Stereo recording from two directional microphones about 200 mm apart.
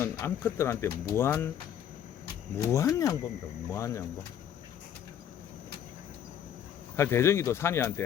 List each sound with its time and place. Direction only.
0.0 s speech: 10° left (ahead or behind)
2.6 s speech: 15° left (ahead or behind)
6.9 s speech: 15° left (ahead or behind)